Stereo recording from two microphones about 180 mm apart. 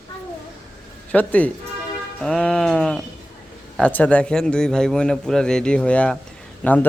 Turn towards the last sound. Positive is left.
turn(degrees=10)  # may be behind; listen again after turning